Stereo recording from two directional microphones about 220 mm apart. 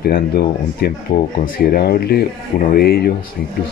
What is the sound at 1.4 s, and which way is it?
Speech, 40° left (ahead or behind).